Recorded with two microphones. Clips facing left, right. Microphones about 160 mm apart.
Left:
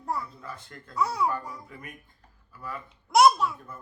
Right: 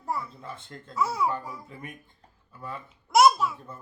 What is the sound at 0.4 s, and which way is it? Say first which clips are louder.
Speech: right 1 dB; 25° right (ahead or behind).